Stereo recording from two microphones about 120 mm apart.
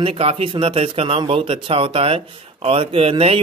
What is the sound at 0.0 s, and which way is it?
Speech, 55° right (ahead or behind).